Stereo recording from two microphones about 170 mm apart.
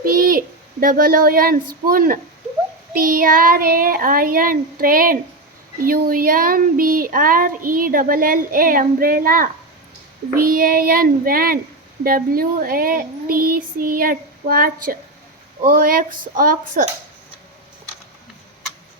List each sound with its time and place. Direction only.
0.0 s speech: 55° right (ahead or behind)
10.5 s speech: 60° right (ahead or behind)